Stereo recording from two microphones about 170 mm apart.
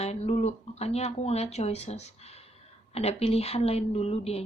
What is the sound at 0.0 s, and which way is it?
Speech, 40° left (ahead or behind).